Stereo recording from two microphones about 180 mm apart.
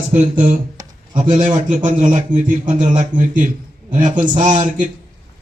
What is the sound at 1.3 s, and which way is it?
A man's voice, 45° right (ahead or behind).